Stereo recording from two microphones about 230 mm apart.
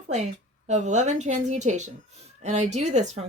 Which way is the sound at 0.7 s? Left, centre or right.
Right.